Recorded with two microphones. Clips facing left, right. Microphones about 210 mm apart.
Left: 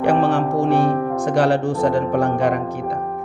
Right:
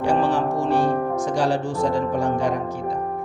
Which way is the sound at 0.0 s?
60° left (ahead or behind).